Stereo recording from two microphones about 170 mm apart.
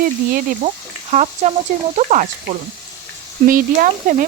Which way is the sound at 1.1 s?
40° right (ahead or behind).